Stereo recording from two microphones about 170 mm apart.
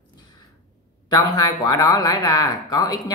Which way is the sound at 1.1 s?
25° left (ahead or behind).